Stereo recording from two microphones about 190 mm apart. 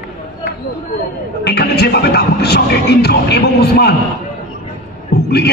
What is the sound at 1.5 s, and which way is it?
Speech, 60° left (ahead or behind).